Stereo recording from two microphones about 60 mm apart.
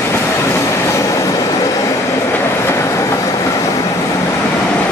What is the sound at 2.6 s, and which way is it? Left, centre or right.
Train, left.